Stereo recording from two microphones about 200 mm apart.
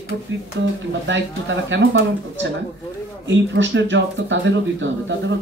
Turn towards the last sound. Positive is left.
turn(degrees=-65)  # may be behind; listen again after turning